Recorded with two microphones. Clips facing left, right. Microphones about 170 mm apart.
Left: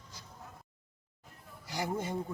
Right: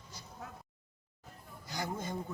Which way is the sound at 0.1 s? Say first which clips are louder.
Right 2 dB; 90° left.